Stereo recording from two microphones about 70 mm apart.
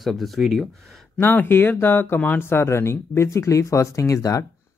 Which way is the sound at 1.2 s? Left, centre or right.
Left.